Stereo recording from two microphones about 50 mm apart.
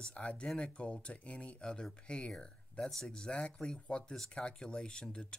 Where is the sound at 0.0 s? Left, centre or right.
Left.